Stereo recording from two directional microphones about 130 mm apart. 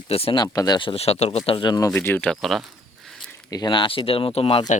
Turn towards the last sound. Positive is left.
turn(degrees=45)  # may be behind; listen again after turning